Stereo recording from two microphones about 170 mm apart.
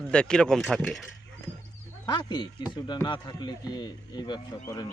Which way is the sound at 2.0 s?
25° left (ahead or behind).